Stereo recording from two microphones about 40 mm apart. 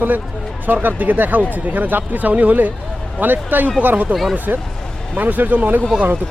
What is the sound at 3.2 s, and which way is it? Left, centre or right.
Speech, right.